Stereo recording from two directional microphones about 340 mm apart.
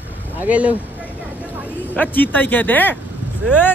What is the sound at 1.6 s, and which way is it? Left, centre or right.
Speech, centre.